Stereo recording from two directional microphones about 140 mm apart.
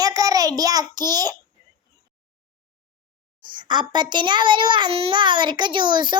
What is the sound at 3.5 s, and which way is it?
A child's voice, 35° right (ahead or behind).